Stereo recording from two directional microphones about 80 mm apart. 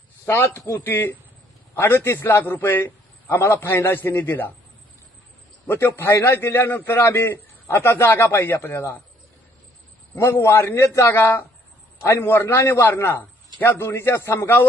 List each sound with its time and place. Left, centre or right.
0.3 s a man's voice: left
5.6 s a man's voice: left
10.2 s a man's voice: left